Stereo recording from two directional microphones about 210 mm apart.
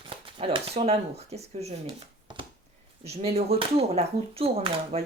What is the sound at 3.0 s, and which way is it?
Speech, 30° right (ahead or behind).